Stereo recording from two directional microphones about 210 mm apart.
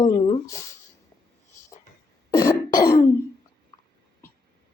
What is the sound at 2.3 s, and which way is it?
Throat clearing, 15° left (ahead or behind).